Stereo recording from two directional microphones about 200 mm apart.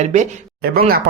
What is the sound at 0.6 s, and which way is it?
Speech, 50° right (ahead or behind).